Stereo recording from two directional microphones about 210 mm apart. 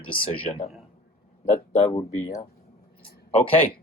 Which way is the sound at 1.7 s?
30° left (ahead or behind).